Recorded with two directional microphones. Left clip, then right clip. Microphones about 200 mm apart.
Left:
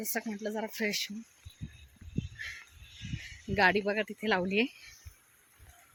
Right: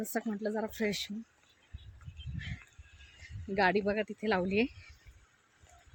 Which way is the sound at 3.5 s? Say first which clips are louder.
Left 2 dB; 5° left (ahead or behind).